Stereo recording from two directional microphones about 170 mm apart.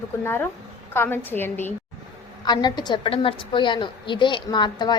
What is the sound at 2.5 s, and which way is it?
A woman's voice, 25° left (ahead or behind).